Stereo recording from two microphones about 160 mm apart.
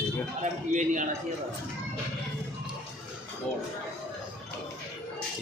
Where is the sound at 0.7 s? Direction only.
50° right (ahead or behind).